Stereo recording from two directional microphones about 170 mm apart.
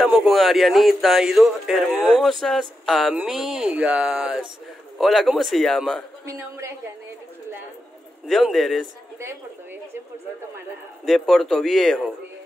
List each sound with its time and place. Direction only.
0.0 s speech: centre (ahead or behind)
6.2 s speech: 15° right (ahead or behind)
8.3 s speech: centre (ahead or behind)
11.1 s speech: 5° left (ahead or behind)